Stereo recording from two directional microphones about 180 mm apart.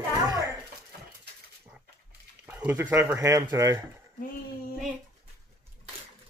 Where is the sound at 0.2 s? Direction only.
20° right (ahead or behind).